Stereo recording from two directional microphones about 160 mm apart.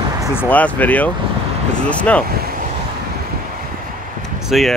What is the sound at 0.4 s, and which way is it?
Speech, 10° left (ahead or behind).